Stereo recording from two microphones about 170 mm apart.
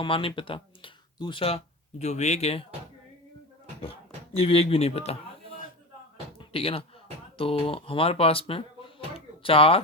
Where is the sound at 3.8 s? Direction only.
35° left (ahead or behind).